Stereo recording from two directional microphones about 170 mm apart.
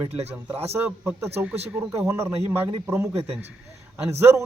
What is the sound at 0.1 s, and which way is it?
Speech, 40° right (ahead or behind).